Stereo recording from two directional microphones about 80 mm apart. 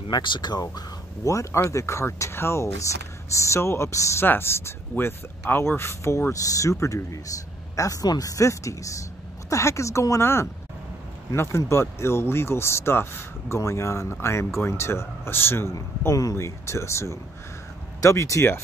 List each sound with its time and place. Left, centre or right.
0.1 s speech: left